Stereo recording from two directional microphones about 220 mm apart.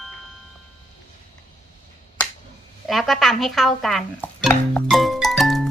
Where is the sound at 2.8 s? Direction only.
Centre (ahead or behind).